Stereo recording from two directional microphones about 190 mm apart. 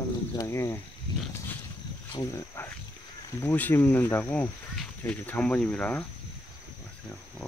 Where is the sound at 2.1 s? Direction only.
15° left (ahead or behind).